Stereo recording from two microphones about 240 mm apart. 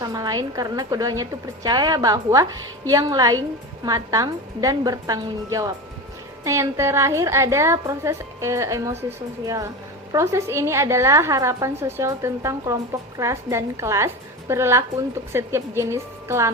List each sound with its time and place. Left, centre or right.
0.0 s a woman's voice: centre